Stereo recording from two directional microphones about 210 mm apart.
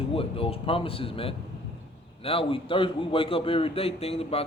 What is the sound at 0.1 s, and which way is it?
A man's voice, 25° left (ahead or behind).